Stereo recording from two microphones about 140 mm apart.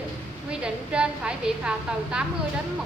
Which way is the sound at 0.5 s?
5° right (ahead or behind).